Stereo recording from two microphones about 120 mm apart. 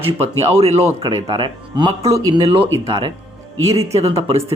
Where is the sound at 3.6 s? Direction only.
55° right (ahead or behind).